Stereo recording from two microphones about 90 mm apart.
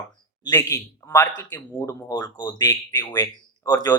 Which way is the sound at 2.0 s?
50° left (ahead or behind).